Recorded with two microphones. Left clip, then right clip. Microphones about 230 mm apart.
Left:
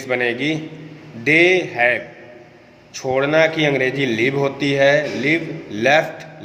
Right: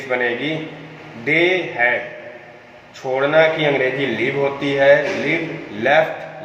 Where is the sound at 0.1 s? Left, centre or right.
Left.